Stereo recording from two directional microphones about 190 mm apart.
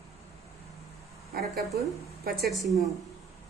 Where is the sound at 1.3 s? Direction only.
55° right (ahead or behind).